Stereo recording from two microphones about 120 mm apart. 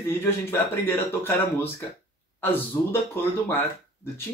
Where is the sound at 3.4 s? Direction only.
20° left (ahead or behind).